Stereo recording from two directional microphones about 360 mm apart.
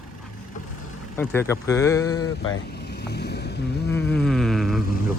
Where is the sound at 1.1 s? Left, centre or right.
Centre.